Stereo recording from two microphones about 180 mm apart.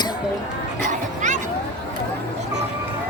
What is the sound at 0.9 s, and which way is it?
Music, 45° right (ahead or behind).